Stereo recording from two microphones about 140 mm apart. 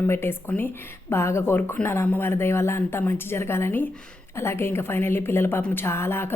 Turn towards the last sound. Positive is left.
turn(degrees=15)  # may be behind; listen again after turning